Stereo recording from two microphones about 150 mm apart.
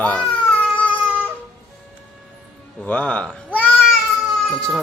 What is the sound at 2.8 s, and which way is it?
Cat, 10° left (ahead or behind).